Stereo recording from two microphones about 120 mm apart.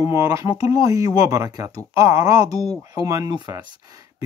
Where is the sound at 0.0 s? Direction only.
25° right (ahead or behind).